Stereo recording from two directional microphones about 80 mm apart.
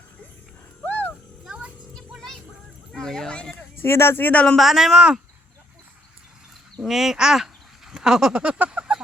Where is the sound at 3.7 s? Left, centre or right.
Left.